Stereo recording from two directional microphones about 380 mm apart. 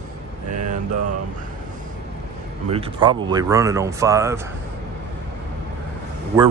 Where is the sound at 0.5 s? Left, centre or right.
Right.